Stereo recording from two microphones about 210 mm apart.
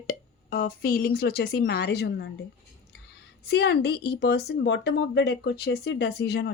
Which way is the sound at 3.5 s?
50° left (ahead or behind).